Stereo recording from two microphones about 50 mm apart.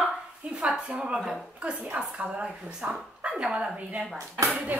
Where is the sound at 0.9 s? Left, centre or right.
Right.